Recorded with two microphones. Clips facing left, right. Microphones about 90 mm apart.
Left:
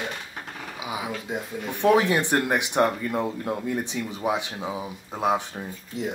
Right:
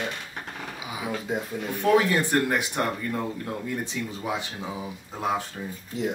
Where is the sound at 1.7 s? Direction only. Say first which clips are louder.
Left 2 dB; 20° left (ahead or behind).